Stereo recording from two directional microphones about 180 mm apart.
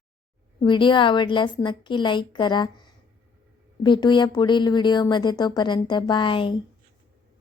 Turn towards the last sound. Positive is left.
turn(degrees=25)  # may be behind; listen again after turning